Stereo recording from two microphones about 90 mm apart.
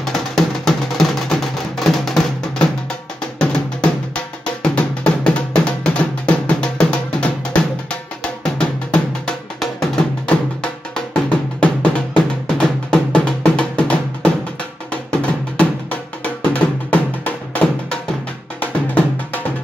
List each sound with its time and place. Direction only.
0.0 s music: 5° left (ahead or behind)
3.3 s music: 10° left (ahead or behind)
11.1 s drum: 10° left (ahead or behind)
14.9 s music: 15° left (ahead or behind)